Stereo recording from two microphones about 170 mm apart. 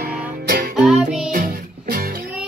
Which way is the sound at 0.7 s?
Centre (ahead or behind).